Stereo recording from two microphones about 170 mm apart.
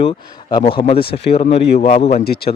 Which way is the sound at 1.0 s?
70° left (ahead or behind).